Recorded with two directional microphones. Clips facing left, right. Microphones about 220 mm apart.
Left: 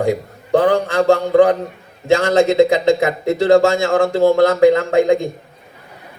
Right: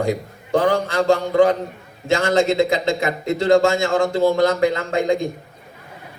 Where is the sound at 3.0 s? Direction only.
15° right (ahead or behind).